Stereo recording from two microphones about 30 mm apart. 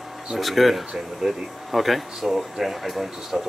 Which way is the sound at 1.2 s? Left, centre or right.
Centre.